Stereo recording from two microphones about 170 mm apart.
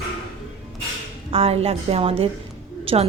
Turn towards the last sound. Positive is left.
turn(degrees=-35)  # may be behind; listen again after turning